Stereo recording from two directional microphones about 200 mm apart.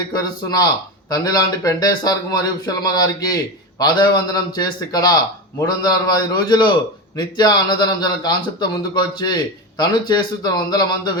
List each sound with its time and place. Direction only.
0.1 s speech: 20° left (ahead or behind)